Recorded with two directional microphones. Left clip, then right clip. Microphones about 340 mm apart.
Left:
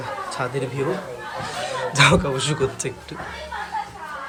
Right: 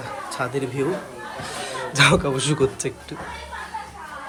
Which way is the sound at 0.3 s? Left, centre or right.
Centre.